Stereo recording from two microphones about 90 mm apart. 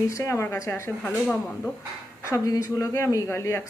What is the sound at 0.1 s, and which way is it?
Speech, 35° left (ahead or behind).